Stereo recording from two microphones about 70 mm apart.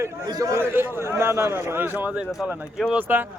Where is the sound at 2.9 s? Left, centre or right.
Right.